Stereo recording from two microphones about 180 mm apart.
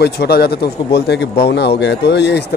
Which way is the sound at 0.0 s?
60° left (ahead or behind).